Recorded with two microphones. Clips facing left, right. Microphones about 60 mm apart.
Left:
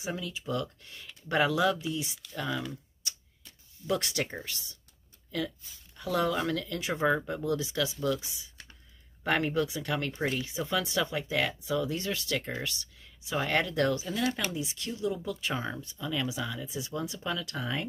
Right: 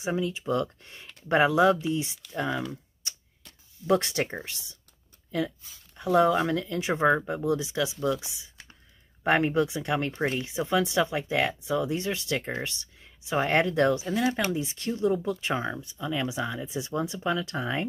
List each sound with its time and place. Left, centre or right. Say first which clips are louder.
0.0 s speech: right 7 dB; right
3.8 s speech: right 6 dB; right
5.9 s speech: right 7 dB; right
15.6 s speech: right 4 dB; centre